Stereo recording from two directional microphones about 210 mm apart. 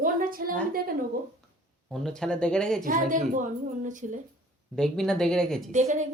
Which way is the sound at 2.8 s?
40° right (ahead or behind).